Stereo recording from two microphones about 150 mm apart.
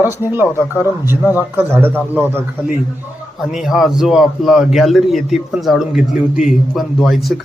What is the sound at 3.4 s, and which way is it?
A man's voice, centre (ahead or behind).